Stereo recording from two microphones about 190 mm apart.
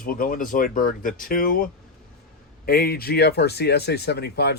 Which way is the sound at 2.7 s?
55° left (ahead or behind).